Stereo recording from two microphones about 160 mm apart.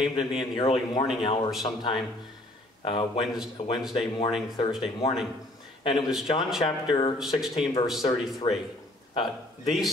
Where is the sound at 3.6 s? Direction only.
45° left (ahead or behind).